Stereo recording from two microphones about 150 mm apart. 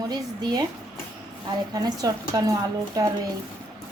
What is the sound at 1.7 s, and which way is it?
Speech, 25° right (ahead or behind).